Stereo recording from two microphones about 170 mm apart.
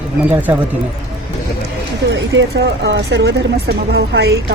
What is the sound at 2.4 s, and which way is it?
Speech, 90° right.